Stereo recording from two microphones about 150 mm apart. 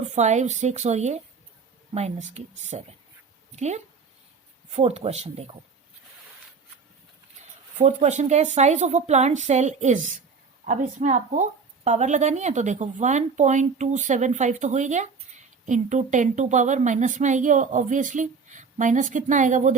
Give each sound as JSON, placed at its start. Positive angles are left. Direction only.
{"t": 0.1, "sound": "a woman's voice", "side_deg": -50}
{"t": 7.8, "sound": "a woman's voice", "side_deg": -50}